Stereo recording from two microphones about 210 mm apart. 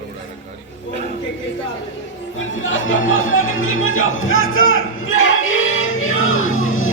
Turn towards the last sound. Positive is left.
turn(degrees=75)  # may be behind; listen again after turning